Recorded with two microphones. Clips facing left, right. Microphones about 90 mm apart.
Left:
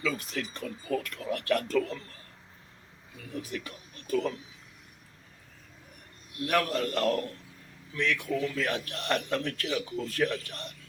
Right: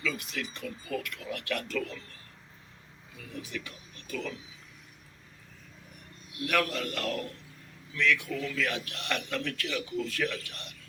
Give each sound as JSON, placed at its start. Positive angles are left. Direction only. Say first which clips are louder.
{"t": 0.0, "sound": "speech", "louder": "left 2 dB", "side_deg": 35}
{"t": 3.4, "sound": "speech", "louder": "left 2 dB", "side_deg": 40}
{"t": 6.3, "sound": "speech", "louder": "left 2 dB", "side_deg": 35}